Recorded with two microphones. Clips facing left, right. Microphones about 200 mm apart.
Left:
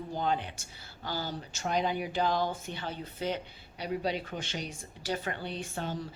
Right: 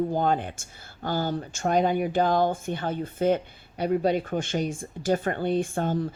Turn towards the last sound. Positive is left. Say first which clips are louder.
# right 10 dB
turn(degrees=-50)  # may be behind; listen again after turning